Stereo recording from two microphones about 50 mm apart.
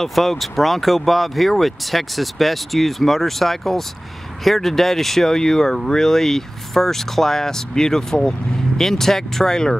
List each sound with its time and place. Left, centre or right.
0.0 s speech: centre